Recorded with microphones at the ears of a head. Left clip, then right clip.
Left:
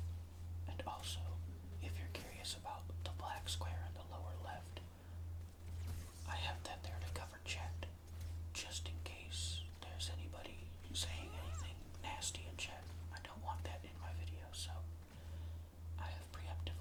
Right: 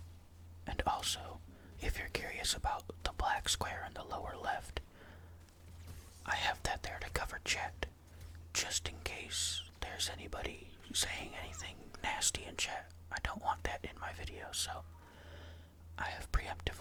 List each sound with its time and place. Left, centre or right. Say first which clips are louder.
0.6 s whispering: right 12 dB; right
1.8 s speech: right 12 dB; right
6.2 s speech: right 11 dB; right
16.0 s speech: right 12 dB; right